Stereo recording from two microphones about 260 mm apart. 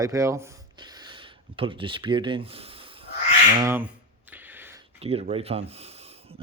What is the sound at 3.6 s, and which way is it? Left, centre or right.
Speech, centre.